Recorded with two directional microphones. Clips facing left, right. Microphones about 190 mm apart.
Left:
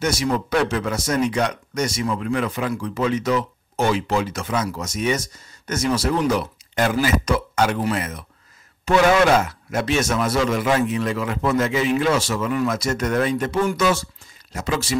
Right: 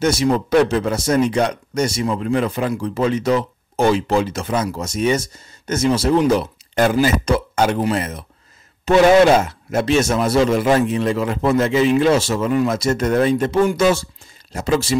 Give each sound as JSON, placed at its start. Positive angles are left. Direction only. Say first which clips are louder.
{"t": 0.0, "sound": "speech", "louder": "right 5 dB", "side_deg": -30}